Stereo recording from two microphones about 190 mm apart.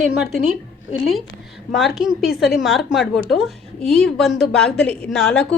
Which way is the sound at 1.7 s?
Centre (ahead or behind).